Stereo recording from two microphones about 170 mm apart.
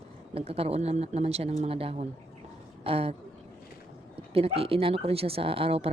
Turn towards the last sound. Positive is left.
turn(degrees=-35)  # may be behind; listen again after turning